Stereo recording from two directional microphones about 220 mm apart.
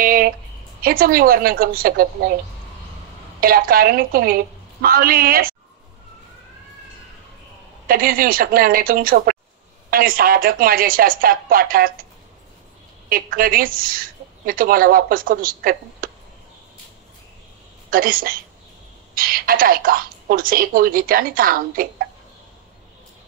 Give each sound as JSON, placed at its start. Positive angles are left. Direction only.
{"t": 0.0, "sound": "a sound", "side_deg": -40}
{"t": 0.8, "sound": "a woman's voice", "side_deg": -40}
{"t": 3.3, "sound": "a woman's voice", "side_deg": -40}
{"t": 7.9, "sound": "a woman's voice", "side_deg": -40}
{"t": 13.1, "sound": "a woman's voice", "side_deg": -40}
{"t": 17.8, "sound": "a woman's voice", "side_deg": -40}